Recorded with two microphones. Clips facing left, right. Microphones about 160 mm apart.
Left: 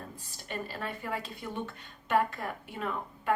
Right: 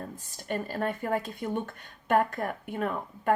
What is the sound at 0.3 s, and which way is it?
Speech, 50° right (ahead or behind).